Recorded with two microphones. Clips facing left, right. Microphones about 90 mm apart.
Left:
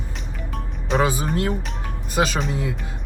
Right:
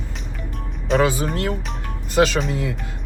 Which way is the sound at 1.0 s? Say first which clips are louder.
Left 2 dB; 20° left (ahead or behind).